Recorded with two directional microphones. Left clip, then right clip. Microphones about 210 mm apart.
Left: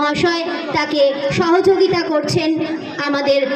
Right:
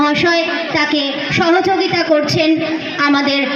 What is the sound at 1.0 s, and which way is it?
Speech, 55° left (ahead or behind).